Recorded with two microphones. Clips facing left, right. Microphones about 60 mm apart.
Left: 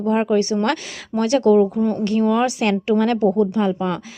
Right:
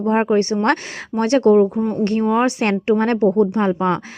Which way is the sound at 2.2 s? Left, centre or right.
Right.